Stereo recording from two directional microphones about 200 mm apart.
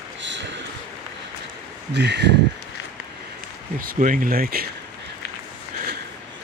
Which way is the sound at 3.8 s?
40° right (ahead or behind).